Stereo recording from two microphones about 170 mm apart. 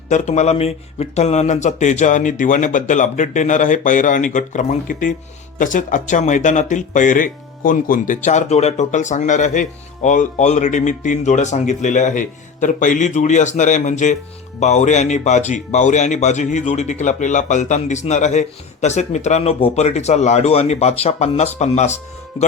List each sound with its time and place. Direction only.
0.1 s speech: 45° left (ahead or behind)